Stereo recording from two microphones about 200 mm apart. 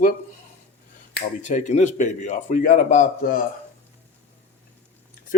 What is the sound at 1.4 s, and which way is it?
Speech, 40° left (ahead or behind).